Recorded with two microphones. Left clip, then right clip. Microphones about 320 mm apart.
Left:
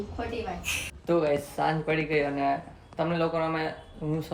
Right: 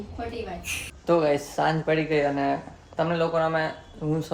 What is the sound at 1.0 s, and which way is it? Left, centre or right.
Speech, centre.